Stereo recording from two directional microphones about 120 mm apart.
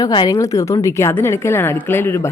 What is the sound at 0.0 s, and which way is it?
Speech, 40° left (ahead or behind).